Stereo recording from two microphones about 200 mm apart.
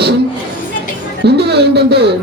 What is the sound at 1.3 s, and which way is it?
Speech, 55° right (ahead or behind).